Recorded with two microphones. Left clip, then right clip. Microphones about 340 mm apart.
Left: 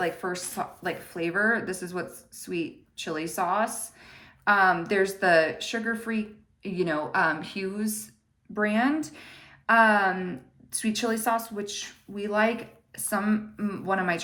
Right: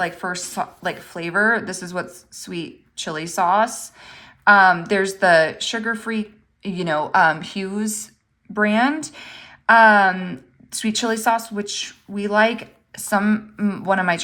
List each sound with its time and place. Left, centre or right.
0.0 s a woman's voice: right